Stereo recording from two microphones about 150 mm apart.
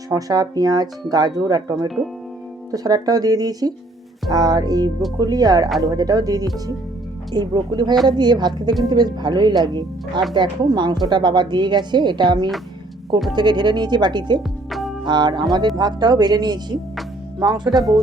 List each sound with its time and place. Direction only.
0.1 s speech: 25° right (ahead or behind)
14.7 s music: centre (ahead or behind)
15.0 s speech: 30° right (ahead or behind)